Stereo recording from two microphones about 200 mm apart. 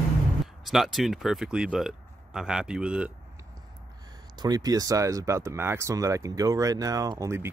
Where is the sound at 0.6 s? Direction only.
Centre (ahead or behind).